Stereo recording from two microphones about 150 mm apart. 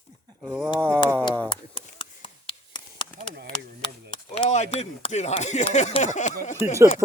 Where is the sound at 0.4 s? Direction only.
10° right (ahead or behind).